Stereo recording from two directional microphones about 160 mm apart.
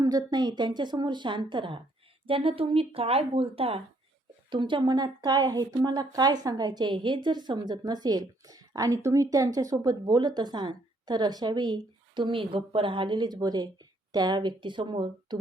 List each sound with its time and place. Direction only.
0.0 s a woman's voice: 25° right (ahead or behind)